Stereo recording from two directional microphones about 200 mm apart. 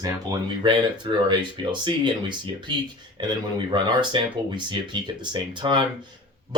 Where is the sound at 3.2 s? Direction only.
25° right (ahead or behind).